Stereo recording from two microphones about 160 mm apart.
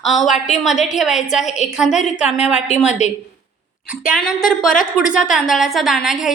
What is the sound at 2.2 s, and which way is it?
Speech, 10° right (ahead or behind).